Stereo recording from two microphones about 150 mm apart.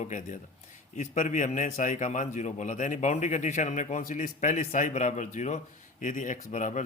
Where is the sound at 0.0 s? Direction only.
55° left (ahead or behind).